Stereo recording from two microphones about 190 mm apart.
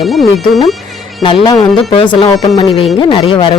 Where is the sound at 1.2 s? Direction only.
25° left (ahead or behind).